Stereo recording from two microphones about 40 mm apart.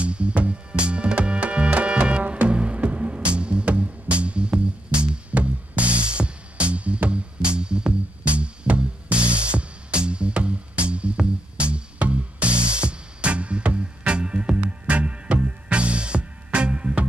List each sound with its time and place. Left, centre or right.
0.0 s music: right